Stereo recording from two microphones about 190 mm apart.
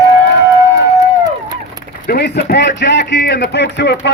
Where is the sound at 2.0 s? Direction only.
55° left (ahead or behind).